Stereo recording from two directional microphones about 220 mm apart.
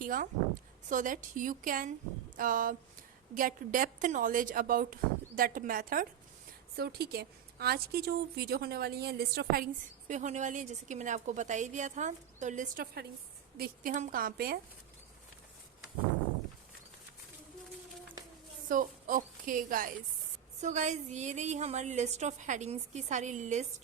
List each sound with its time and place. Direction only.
0.0 s a woman's voice: 40° right (ahead or behind)
10.1 s a woman's voice: 35° right (ahead or behind)
18.7 s a woman's voice: 40° right (ahead or behind)